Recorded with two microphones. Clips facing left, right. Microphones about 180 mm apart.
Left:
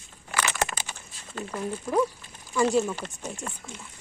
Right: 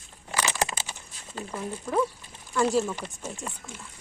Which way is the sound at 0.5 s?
25° right (ahead or behind).